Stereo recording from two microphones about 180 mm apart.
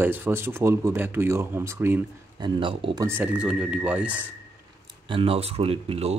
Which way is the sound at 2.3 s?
25° right (ahead or behind).